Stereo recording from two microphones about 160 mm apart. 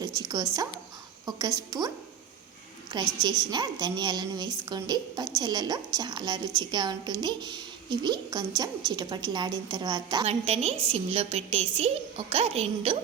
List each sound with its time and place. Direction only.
0.0 s a woman's voice: 25° right (ahead or behind)
3.2 s a woman's voice: 25° right (ahead or behind)
10.2 s a woman's voice: 40° right (ahead or behind)